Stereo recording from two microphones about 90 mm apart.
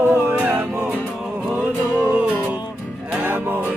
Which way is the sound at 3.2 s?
20° right (ahead or behind).